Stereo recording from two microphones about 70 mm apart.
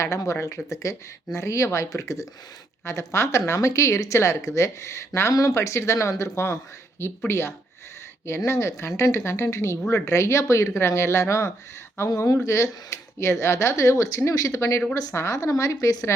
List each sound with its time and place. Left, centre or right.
0.0 s speech: left
5.3 s speech: left